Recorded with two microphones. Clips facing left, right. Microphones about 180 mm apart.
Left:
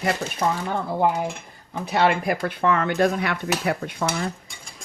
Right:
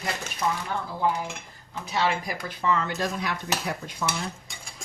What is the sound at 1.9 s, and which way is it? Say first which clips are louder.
A woman's voice: left 6 dB; 60° left (ahead or behind).